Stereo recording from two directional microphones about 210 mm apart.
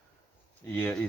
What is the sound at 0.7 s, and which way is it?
Speech, 5° left (ahead or behind).